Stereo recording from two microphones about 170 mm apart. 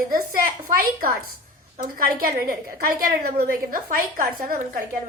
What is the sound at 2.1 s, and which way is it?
A woman's voice, 60° right (ahead or behind).